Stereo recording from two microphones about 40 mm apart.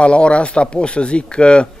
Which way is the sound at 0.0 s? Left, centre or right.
Left.